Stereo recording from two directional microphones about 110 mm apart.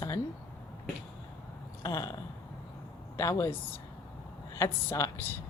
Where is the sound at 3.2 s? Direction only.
30° left (ahead or behind).